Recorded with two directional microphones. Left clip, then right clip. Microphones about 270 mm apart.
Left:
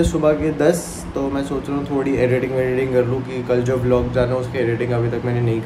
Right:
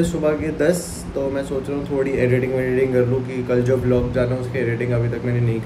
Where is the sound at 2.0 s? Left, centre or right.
Centre.